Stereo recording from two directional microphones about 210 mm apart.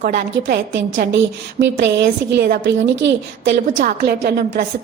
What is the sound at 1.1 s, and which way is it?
A woman's voice, 60° right (ahead or behind).